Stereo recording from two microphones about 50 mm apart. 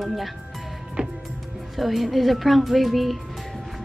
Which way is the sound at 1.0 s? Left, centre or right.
Right.